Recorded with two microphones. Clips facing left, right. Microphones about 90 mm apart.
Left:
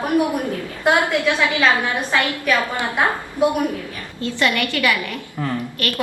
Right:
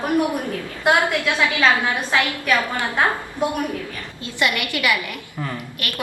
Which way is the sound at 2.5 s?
15° left (ahead or behind).